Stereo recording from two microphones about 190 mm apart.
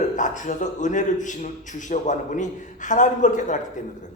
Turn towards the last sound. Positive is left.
turn(degrees=40)  # may be behind; listen again after turning